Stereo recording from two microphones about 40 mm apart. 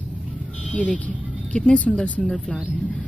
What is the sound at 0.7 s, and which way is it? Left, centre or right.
A woman's voice, left.